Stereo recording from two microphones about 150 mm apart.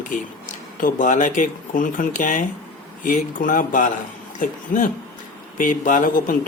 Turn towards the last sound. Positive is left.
turn(degrees=65)  # may be behind; listen again after turning